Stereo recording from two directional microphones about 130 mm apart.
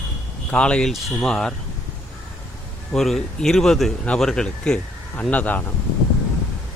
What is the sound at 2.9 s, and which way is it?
Speech, 5° left (ahead or behind).